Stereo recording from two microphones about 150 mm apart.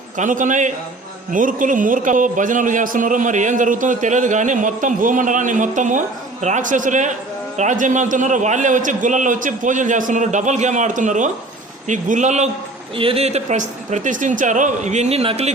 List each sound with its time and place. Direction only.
0.2 s a man's voice: 60° right (ahead or behind)
13.0 s speech: 40° right (ahead or behind)